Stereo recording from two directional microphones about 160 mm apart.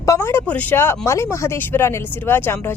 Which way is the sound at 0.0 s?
20° left (ahead or behind).